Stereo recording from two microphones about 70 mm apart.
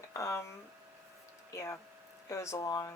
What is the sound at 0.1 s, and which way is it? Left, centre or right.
Speech, left.